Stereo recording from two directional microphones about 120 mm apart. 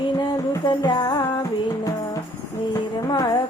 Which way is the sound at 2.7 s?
30° left (ahead or behind).